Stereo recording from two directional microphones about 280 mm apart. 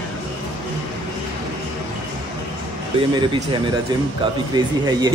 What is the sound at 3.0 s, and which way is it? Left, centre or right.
Speech, centre.